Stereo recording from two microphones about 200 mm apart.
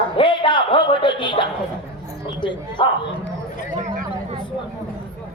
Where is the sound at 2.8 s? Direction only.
25° left (ahead or behind).